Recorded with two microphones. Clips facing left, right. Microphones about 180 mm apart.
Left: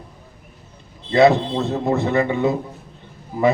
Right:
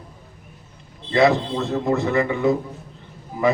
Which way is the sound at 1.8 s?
25° left (ahead or behind).